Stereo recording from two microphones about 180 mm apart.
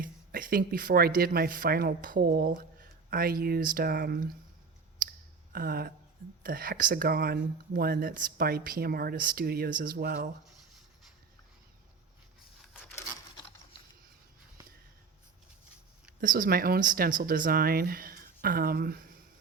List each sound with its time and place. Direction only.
0.0 s speech: 50° right (ahead or behind)
5.5 s speech: 55° right (ahead or behind)
14.6 s a sound: 20° right (ahead or behind)
16.2 s speech: 50° right (ahead or behind)